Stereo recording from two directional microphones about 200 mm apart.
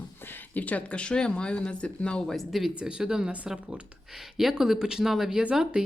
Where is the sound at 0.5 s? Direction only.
5° left (ahead or behind).